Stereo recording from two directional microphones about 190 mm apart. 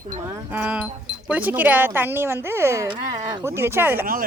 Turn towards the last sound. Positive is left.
turn(degrees=-10)  # may be behind; listen again after turning